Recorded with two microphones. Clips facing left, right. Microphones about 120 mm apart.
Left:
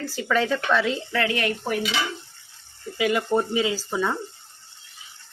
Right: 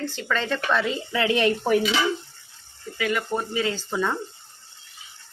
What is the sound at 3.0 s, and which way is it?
Speech, 20° left (ahead or behind).